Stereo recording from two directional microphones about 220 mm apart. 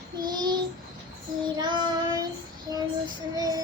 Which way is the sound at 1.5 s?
20° right (ahead or behind).